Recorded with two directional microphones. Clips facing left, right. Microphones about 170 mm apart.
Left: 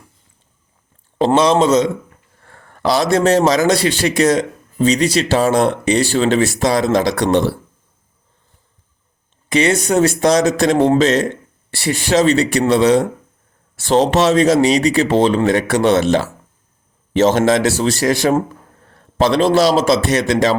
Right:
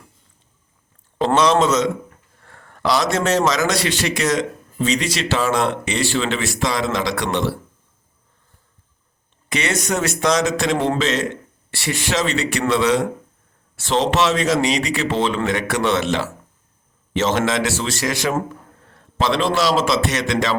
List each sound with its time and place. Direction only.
1.4 s speech: 30° left (ahead or behind)
9.5 s speech: 30° left (ahead or behind)